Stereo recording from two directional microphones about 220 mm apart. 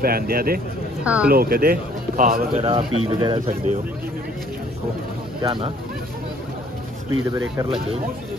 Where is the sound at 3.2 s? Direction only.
20° right (ahead or behind).